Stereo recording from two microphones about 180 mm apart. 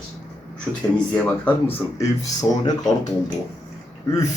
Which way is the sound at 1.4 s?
15° left (ahead or behind).